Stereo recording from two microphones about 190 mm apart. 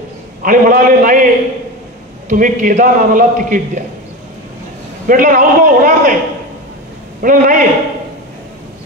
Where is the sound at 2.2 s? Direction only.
45° right (ahead or behind).